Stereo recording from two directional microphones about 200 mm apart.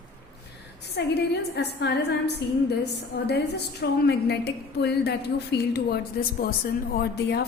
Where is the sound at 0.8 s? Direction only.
55° left (ahead or behind).